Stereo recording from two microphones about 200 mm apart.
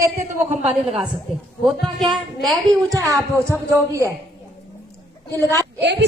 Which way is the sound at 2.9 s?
15° right (ahead or behind).